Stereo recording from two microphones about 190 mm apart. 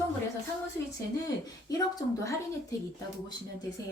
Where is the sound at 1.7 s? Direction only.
20° left (ahead or behind).